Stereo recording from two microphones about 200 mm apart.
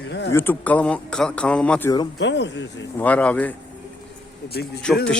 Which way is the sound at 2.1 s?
60° left (ahead or behind).